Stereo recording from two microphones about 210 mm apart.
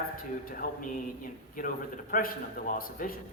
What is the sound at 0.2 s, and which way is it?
A man's voice, 45° left (ahead or behind).